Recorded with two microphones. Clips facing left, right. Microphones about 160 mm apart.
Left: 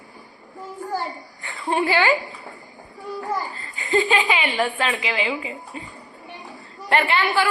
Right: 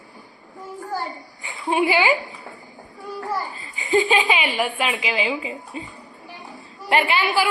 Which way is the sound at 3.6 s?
15° right (ahead or behind).